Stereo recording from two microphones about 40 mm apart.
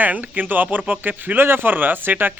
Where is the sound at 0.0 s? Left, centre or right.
Right.